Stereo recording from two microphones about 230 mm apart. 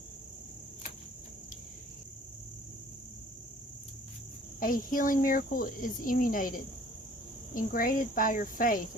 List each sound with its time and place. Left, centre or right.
4.6 s speech: left